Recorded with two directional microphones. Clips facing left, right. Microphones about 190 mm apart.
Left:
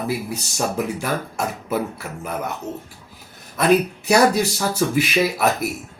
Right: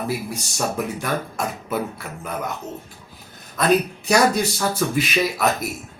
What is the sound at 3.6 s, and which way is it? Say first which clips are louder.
Speech: left 2 dB; 5° left (ahead or behind).